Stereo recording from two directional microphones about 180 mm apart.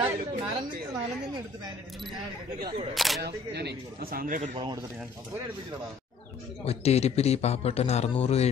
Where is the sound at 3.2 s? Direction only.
65° right (ahead or behind).